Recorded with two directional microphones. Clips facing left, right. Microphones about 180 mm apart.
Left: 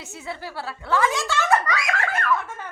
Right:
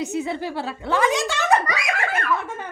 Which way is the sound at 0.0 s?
20° right (ahead or behind).